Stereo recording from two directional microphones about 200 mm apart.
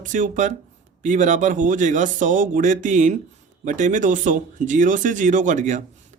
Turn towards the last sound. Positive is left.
turn(degrees=-40)  # may be behind; listen again after turning